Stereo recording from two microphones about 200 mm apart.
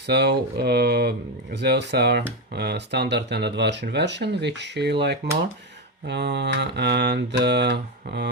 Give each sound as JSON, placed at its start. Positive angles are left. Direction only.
{"t": 0.0, "sound": "speech", "side_deg": -55}